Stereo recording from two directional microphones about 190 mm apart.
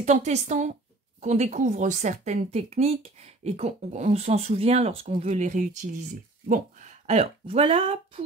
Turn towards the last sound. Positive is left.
turn(degrees=-30)  # may be behind; listen again after turning